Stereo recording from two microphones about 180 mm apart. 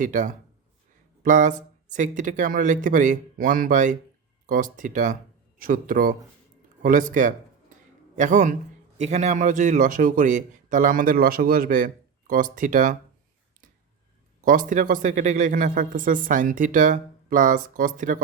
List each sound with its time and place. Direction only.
0.0 s speech: 45° right (ahead or behind)
6.8 s a sound: 45° right (ahead or behind)
9.0 s speech: 40° right (ahead or behind)
14.4 s speech: 50° right (ahead or behind)